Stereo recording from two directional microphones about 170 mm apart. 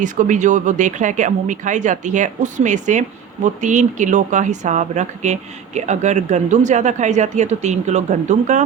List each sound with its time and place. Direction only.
0.0 s speech: 50° right (ahead or behind)